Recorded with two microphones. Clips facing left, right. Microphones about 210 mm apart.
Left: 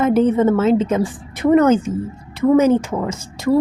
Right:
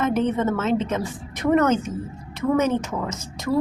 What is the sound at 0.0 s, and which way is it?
A woman's voice, 30° left (ahead or behind).